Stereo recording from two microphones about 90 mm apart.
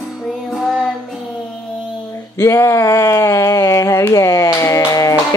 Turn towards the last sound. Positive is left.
turn(degrees=40)  # may be behind; listen again after turning